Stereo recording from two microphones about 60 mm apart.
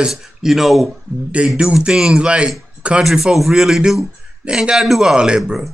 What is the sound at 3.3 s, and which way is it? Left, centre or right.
A man's voice, centre.